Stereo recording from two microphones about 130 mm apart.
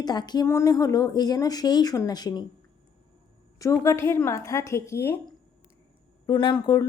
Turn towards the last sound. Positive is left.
turn(degrees=35)  # may be behind; listen again after turning